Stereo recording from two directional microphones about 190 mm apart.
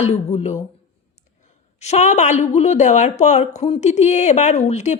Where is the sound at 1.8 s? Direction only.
35° left (ahead or behind).